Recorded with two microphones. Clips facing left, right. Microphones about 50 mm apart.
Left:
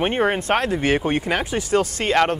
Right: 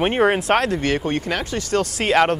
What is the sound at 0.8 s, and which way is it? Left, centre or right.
Speech, centre.